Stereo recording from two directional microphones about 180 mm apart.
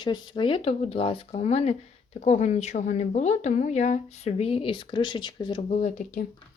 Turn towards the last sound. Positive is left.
turn(degrees=40)  # may be behind; listen again after turning